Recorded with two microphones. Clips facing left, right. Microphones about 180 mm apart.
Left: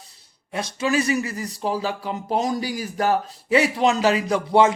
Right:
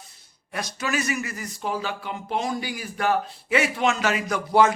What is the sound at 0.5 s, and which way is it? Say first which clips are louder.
Speech: left 5 dB; 25° left (ahead or behind).